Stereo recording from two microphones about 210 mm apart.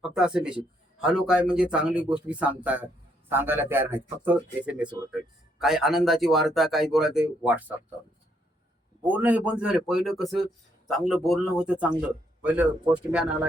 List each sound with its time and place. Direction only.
0.0 s a man's voice: 5° right (ahead or behind)
9.0 s a man's voice: 10° right (ahead or behind)